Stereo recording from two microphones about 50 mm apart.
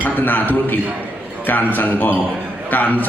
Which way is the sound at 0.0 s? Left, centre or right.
Left.